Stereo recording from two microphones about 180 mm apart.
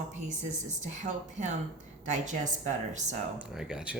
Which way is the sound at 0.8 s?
40° right (ahead or behind).